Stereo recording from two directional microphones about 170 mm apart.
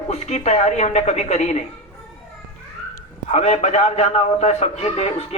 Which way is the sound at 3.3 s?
40° left (ahead or behind).